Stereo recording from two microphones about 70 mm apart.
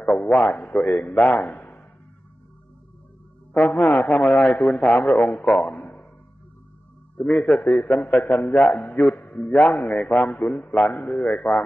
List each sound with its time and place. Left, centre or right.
0.0 s a man's voice: centre
3.5 s a man's voice: left
7.2 s a man's voice: left